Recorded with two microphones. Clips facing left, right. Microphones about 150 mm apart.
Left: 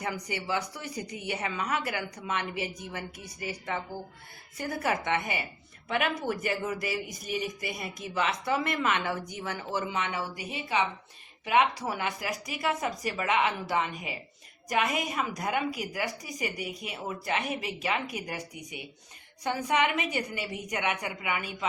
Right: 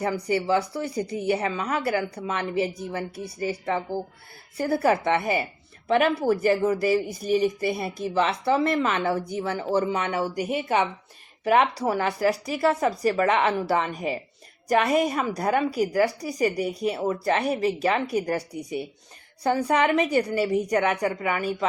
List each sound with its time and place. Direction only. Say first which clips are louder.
0.0 s speech: right 9 dB; 35° right (ahead or behind)
11.4 s speech: right 5 dB; 35° right (ahead or behind)